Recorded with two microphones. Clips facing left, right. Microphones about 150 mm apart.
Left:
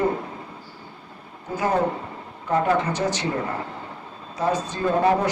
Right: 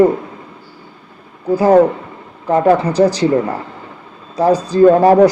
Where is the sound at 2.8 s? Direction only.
35° right (ahead or behind).